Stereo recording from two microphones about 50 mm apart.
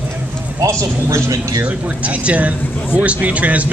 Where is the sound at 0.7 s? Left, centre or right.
Right.